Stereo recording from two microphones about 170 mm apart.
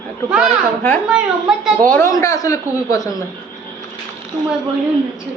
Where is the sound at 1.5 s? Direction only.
Centre (ahead or behind).